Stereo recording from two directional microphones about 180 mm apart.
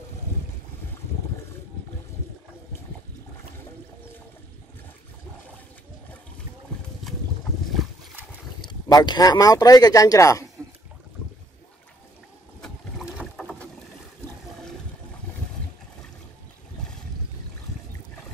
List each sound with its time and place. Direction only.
7.7 s boat: centre (ahead or behind)
8.6 s speech: 25° left (ahead or behind)
12.6 s boat: centre (ahead or behind)